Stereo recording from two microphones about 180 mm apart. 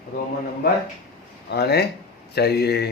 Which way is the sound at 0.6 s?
60° left (ahead or behind).